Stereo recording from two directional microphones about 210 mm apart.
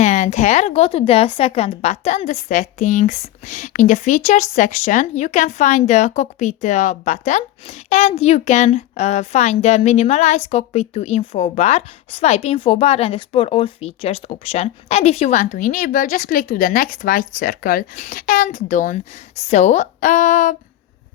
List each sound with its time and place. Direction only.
0.0 s speech: 35° left (ahead or behind)